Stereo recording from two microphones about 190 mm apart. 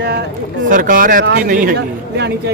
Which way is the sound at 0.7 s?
45° right (ahead or behind).